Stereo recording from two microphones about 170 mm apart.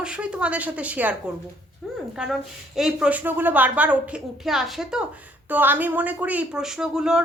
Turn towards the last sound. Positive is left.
turn(degrees=-5)  # may be behind; listen again after turning